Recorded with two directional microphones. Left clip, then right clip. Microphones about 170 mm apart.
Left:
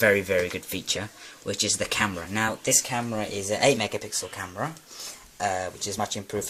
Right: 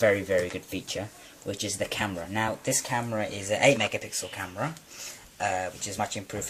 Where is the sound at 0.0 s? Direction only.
40° left (ahead or behind).